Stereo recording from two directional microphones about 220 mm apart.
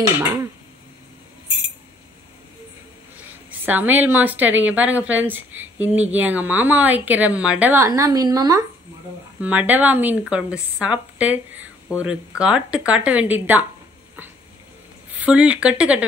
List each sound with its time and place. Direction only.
3.4 s a woman's voice: 10° right (ahead or behind)
15.1 s speech: 5° right (ahead or behind)